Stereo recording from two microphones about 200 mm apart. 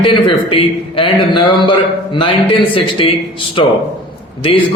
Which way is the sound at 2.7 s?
25° left (ahead or behind).